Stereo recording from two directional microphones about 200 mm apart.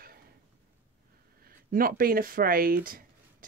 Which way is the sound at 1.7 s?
45° right (ahead or behind).